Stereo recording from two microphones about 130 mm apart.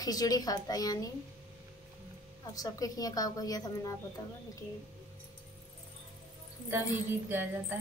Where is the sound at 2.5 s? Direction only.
30° left (ahead or behind).